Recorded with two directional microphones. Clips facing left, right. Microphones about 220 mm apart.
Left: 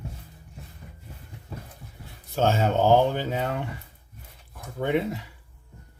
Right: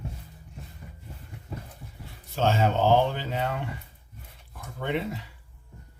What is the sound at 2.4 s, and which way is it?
Speech, 45° left (ahead or behind).